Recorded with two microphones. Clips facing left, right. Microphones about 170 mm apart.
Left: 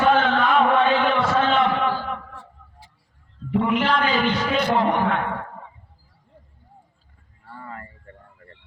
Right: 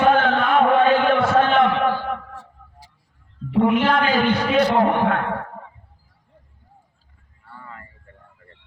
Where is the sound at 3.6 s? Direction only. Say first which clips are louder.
Right 4 dB; 55° right (ahead or behind).